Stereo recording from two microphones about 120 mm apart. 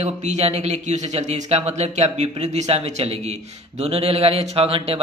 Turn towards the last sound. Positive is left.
turn(degrees=-55)  # may be behind; listen again after turning